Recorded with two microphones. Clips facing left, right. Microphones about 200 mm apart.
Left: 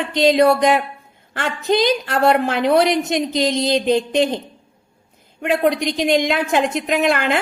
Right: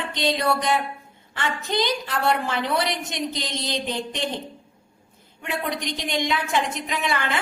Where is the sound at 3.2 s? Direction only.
90° left.